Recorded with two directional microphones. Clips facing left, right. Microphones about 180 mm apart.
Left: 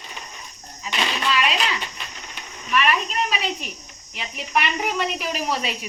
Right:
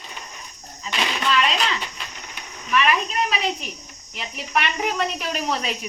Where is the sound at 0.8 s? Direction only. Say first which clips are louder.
Even; 10° left (ahead or behind).